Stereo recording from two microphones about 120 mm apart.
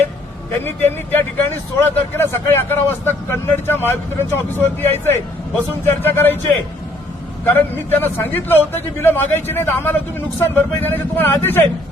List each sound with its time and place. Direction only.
0.6 s a man's voice: 15° left (ahead or behind)
7.5 s a man's voice: 15° left (ahead or behind)